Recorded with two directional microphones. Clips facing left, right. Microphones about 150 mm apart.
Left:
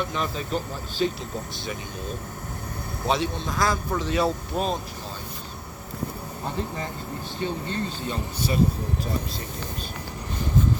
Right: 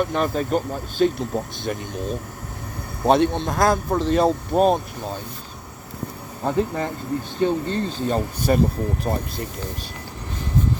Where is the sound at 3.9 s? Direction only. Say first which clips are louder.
Right 6 dB; 40° right (ahead or behind).